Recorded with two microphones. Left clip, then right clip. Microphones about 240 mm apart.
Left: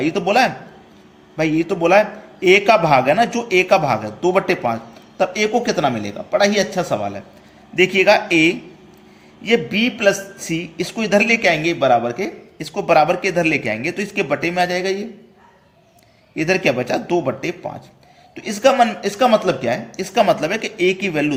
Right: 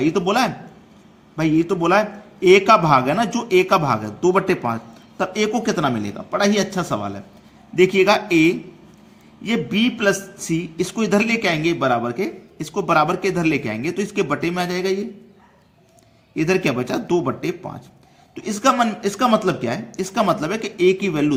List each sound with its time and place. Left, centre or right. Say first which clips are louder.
0.0 s a man's voice: left 3 dB; right
16.3 s a man's voice: left 2 dB; right